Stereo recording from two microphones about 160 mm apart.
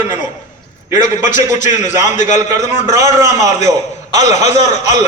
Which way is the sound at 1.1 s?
50° left (ahead or behind).